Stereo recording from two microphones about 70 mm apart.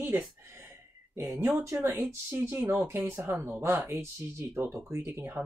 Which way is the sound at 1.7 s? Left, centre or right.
Right.